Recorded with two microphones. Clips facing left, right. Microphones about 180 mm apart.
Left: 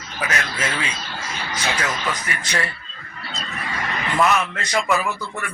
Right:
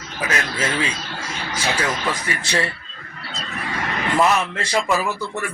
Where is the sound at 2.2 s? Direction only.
30° right (ahead or behind).